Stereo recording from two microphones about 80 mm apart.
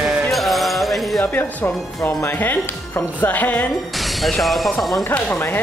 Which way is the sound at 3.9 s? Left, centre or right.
Centre.